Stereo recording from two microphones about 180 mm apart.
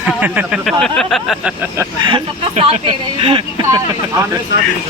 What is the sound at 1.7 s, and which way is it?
A woman's voice, 25° right (ahead or behind).